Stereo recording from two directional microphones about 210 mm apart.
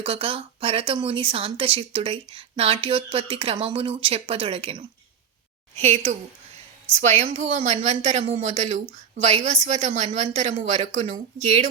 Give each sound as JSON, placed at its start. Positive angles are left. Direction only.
{"t": 0.0, "sound": "speech", "side_deg": -25}